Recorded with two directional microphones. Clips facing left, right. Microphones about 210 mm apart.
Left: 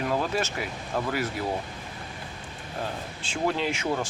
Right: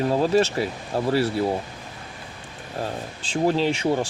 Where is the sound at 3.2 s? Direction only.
30° right (ahead or behind).